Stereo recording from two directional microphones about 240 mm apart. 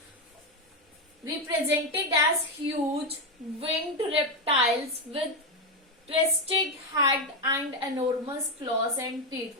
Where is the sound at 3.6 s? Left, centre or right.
Right.